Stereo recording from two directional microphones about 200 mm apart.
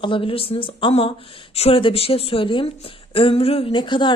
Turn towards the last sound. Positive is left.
turn(degrees=25)  # may be behind; listen again after turning